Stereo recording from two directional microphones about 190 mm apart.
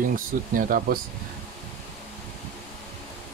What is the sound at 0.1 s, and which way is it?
Speech, 50° right (ahead or behind).